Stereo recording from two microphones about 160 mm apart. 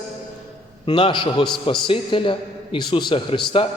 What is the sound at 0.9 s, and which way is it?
A man's voice, 30° left (ahead or behind).